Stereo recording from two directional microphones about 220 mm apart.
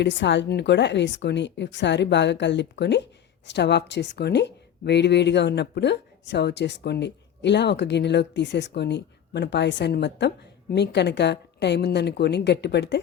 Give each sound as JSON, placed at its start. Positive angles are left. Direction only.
{"t": 0.0, "sound": "a woman's voice", "side_deg": 55}